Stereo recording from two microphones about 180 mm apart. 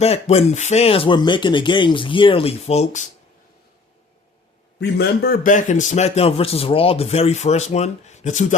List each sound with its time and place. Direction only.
0.0 s a man's voice: 35° left (ahead or behind)
4.8 s a man's voice: 60° left (ahead or behind); by 8.5 s 45° left (ahead or behind)